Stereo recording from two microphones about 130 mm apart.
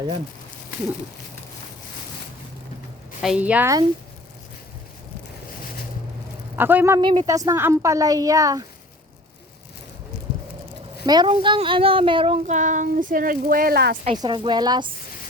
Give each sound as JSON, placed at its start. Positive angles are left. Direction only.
{"t": 3.2, "sound": "a woman's voice", "side_deg": -5}
{"t": 6.6, "sound": "a woman's voice", "side_deg": -15}
{"t": 7.0, "sound": "child singing", "side_deg": -35}
{"t": 7.3, "sound": "a woman's voice", "side_deg": -25}
{"t": 11.0, "sound": "speech", "side_deg": -30}
{"t": 11.3, "sound": "child singing", "side_deg": -40}
{"t": 12.5, "sound": "a woman's voice", "side_deg": -75}
{"t": 14.2, "sound": "child singing", "side_deg": -40}